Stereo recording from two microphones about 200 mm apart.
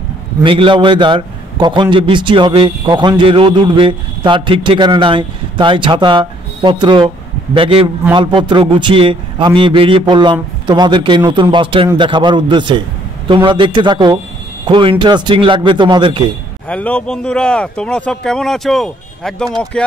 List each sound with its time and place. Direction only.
0.4 s a man's voice: 25° right (ahead or behind)
16.6 s a man's voice: 5° left (ahead or behind)